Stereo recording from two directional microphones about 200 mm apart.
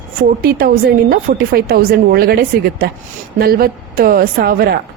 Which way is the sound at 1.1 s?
45° right (ahead or behind).